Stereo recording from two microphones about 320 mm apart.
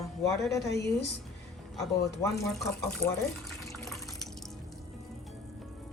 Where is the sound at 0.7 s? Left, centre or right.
Left.